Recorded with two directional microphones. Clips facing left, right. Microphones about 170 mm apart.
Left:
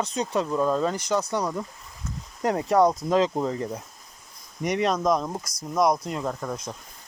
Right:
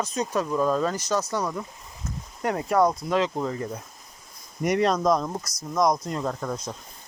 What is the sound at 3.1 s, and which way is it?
Speech, 35° left (ahead or behind).